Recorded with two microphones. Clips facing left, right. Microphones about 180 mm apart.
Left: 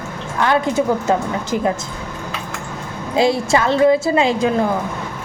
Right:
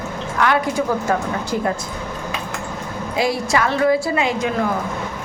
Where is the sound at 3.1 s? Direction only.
25° left (ahead or behind).